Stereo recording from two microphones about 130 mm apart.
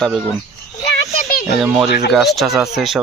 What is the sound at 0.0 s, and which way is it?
Speech, 5° right (ahead or behind).